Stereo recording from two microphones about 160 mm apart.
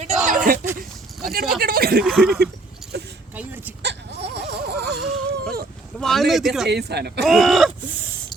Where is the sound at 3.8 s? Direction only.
90° right.